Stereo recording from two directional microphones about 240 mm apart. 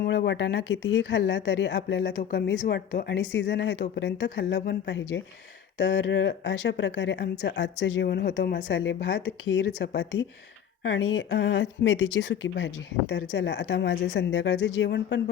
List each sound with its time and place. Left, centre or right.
0.0 s speech: left